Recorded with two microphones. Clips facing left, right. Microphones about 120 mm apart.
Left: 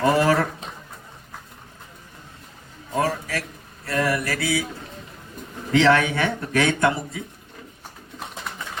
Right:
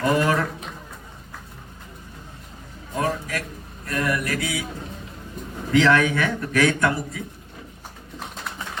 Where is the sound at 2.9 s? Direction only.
35° left (ahead or behind).